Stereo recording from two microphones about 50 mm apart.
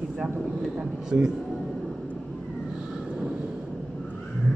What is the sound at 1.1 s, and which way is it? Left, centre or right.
Speech, right.